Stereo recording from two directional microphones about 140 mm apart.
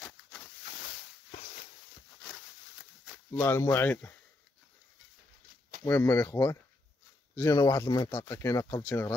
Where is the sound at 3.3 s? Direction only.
15° left (ahead or behind).